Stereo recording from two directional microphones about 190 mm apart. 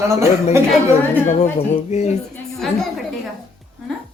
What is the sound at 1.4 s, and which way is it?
Speech, 35° left (ahead or behind).